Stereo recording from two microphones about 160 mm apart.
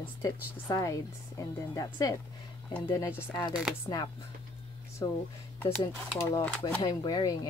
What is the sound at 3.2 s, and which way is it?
Speech, 15° left (ahead or behind).